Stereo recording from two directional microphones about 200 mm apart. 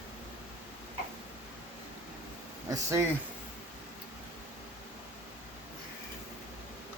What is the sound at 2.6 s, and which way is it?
Speech, 15° right (ahead or behind).